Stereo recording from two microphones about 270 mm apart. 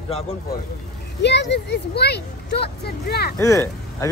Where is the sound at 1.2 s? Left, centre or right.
Left.